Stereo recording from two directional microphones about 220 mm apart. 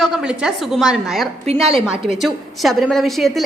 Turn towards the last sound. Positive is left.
turn(degrees=0)  # may be behind; listen again after turning